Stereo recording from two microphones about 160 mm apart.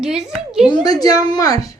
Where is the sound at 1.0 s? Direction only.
25° left (ahead or behind).